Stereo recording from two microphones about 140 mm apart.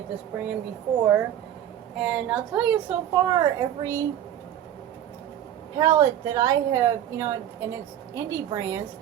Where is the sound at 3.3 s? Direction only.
25° right (ahead or behind).